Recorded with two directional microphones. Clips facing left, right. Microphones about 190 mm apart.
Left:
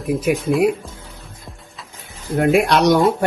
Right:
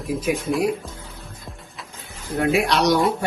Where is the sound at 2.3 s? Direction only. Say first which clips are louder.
Left 5 dB; 50° left (ahead or behind).